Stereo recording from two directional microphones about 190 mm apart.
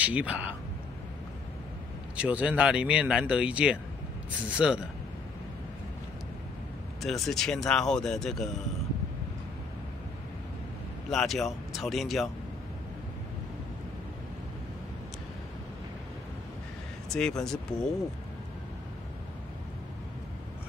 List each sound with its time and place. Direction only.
0.0 s speech: 5° right (ahead or behind)
2.1 s speech: 5° right (ahead or behind)
7.0 s speech: centre (ahead or behind)
11.1 s speech: centre (ahead or behind)
17.1 s speech: 5° left (ahead or behind)